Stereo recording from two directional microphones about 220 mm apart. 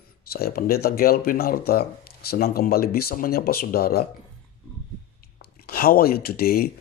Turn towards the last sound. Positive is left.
turn(degrees=45)  # may be behind; listen again after turning